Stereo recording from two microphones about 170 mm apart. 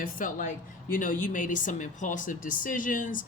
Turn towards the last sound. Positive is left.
turn(degrees=50)  # may be behind; listen again after turning